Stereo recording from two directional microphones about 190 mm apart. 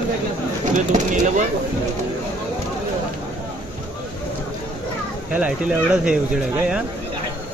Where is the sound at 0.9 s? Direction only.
40° right (ahead or behind).